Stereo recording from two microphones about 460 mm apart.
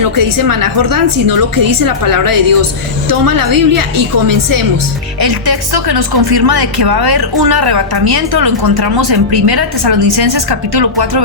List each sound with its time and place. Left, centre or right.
0.2 s speech: right